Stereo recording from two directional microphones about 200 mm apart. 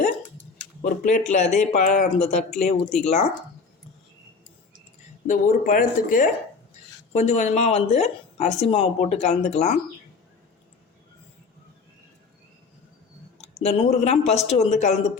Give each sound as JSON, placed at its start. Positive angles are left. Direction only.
{"t": 0.8, "sound": "a woman's voice", "side_deg": 35}
{"t": 5.2, "sound": "a woman's voice", "side_deg": 40}
{"t": 13.4, "sound": "a woman's voice", "side_deg": 35}